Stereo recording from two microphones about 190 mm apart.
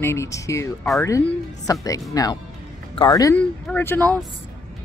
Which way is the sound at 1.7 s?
20° left (ahead or behind).